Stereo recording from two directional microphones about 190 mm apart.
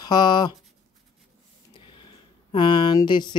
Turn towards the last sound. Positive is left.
turn(degrees=25)  # may be behind; listen again after turning